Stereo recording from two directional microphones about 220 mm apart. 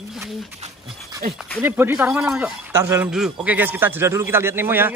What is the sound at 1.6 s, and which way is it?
Speech, 10° right (ahead or behind).